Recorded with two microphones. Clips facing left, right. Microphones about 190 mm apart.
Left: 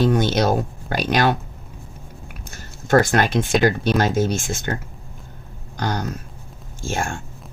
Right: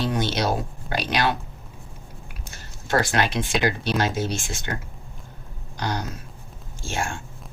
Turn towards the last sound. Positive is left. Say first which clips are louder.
# left 3 dB
turn(degrees=45)  # may be behind; listen again after turning